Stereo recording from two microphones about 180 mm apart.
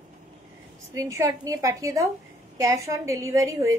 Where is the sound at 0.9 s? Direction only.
15° right (ahead or behind).